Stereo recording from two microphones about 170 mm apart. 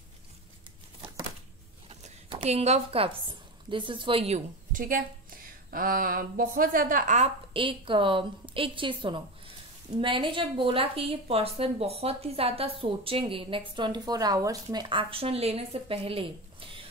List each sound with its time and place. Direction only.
1.9 s zipper: 35° right (ahead or behind)
3.7 s speech: 30° right (ahead or behind)
4.7 s a woman's voice: 55° right (ahead or behind); by 16.8 s 30° right (ahead or behind)